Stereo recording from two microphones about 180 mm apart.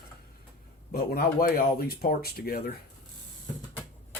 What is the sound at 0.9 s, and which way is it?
Speech, 55° left (ahead or behind).